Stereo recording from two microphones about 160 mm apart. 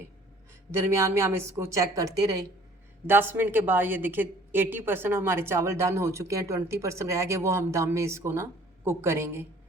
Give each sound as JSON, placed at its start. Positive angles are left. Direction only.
{"t": 0.7, "sound": "a woman's voice", "side_deg": -15}
{"t": 3.1, "sound": "a woman's voice", "side_deg": -15}